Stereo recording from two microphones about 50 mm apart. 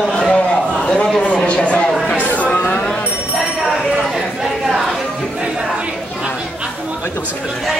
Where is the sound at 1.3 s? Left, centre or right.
Left.